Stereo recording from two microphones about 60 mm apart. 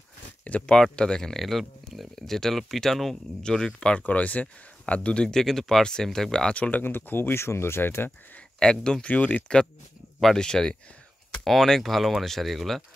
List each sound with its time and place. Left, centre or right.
0.4 s speech: left
4.0 s speech: left
6.5 s speech: left
6.8 s speech: left
8.5 s speech: centre
9.1 s speech: left
10.2 s speech: centre